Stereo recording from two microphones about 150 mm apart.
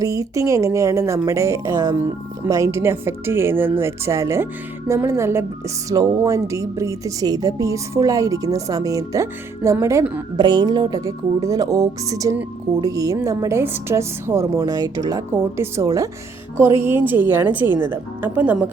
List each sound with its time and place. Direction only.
0.0 s a woman's voice: 20° right (ahead or behind)
10.4 s a woman's voice: 30° right (ahead or behind); by 18.5 s 10° right (ahead or behind)